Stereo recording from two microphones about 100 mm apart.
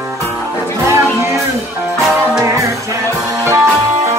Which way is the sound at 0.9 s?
25° right (ahead or behind).